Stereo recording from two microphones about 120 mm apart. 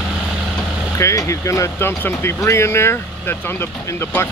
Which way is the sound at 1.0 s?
25° left (ahead or behind).